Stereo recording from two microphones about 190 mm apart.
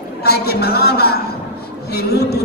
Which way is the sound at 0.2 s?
55° left (ahead or behind).